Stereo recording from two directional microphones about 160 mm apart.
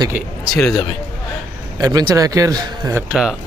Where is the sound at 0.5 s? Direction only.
5° left (ahead or behind).